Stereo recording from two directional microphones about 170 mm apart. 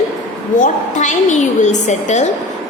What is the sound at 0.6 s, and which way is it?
A woman's voice, 45° left (ahead or behind).